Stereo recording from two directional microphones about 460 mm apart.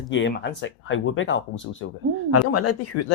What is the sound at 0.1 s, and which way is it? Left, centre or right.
Speech, left.